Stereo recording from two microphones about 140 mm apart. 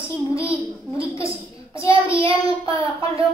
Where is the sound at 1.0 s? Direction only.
40° right (ahead or behind).